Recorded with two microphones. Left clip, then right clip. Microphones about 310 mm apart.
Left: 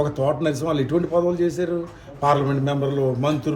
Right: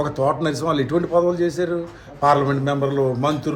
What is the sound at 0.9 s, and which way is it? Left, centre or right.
Speech, centre.